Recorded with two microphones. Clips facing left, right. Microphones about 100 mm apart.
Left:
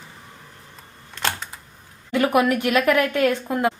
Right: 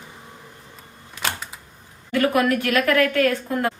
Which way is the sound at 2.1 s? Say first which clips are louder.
Left 1 dB; 20° left (ahead or behind).